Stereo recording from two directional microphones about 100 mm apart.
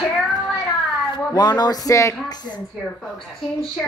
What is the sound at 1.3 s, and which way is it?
Speech, 45° left (ahead or behind).